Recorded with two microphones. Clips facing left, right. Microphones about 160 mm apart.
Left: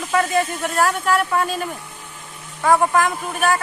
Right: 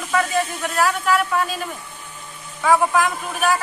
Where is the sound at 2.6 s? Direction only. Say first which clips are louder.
Left 1 dB; centre (ahead or behind).